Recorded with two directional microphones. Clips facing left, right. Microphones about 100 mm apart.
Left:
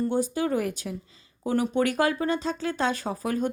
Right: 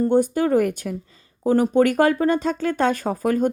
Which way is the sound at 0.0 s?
50° right (ahead or behind).